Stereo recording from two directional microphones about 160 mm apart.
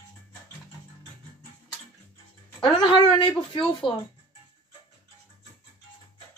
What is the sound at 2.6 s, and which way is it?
Speech, 30° left (ahead or behind).